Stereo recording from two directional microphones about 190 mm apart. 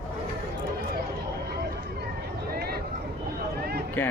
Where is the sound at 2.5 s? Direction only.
55° right (ahead or behind).